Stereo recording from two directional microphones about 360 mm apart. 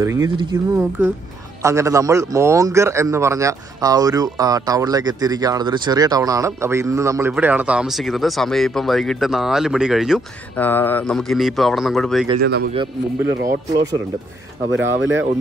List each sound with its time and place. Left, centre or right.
0.0 s a man's voice: centre
12.4 s speech: right
12.7 s a man's voice: centre
14.7 s speech: right